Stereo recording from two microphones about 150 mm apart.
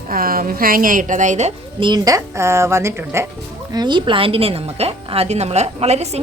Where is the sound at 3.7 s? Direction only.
30° right (ahead or behind); by 6.1 s 45° right (ahead or behind).